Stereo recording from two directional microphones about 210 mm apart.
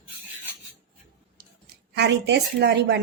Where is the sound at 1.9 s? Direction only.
55° right (ahead or behind).